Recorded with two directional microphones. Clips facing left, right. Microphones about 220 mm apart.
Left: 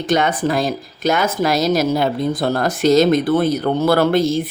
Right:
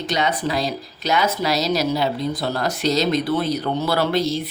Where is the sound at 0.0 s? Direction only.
50° left (ahead or behind).